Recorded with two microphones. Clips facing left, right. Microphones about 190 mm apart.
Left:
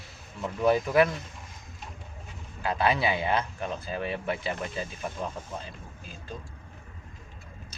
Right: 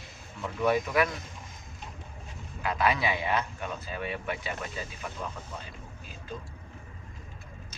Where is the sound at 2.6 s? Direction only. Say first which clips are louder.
Left 2 dB; 30° left (ahead or behind).